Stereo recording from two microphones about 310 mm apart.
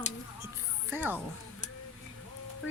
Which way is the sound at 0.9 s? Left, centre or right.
Centre.